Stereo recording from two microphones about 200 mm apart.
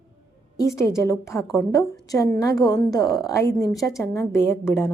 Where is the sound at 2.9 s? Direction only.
20° left (ahead or behind).